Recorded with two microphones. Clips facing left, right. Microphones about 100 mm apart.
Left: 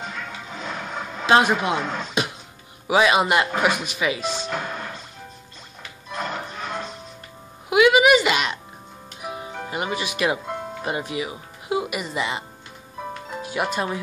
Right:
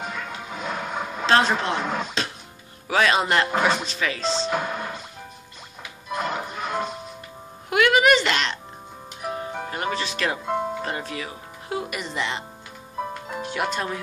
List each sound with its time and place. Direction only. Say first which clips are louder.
0.0 s music: right 1 dB; 5° right (ahead or behind)
1.2 s speech: left 2 dB; 10° left (ahead or behind)
1.8 s speech: right 1 dB; 5° right (ahead or behind)
2.9 s speech: left 2 dB; 10° left (ahead or behind)
4.5 s music: right 3 dB; 10° right (ahead or behind)
7.7 s a sound: left 3 dB; 5° left (ahead or behind)
9.2 s music: right 3 dB; 10° left (ahead or behind)
9.7 s speech: left 2 dB; 10° left (ahead or behind)